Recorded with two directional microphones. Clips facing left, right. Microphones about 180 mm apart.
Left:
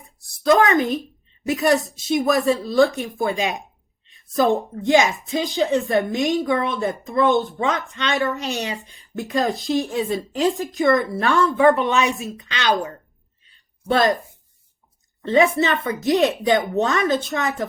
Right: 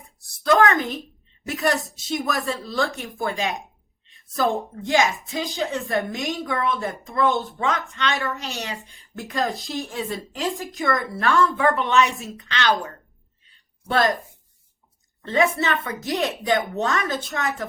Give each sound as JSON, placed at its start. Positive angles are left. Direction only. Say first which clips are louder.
{"t": 0.4, "sound": "a sound", "louder": "left 2 dB", "side_deg": 15}
{"t": 1.5, "sound": "speech", "louder": "left 5 dB", "side_deg": 15}
{"t": 15.3, "sound": "speech", "louder": "left 4 dB", "side_deg": 20}